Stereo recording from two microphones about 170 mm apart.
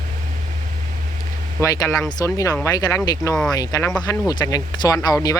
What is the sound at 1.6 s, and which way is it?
Speech, 20° left (ahead or behind).